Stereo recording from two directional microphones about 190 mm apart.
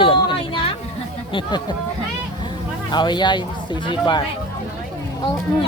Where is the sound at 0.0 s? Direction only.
25° left (ahead or behind).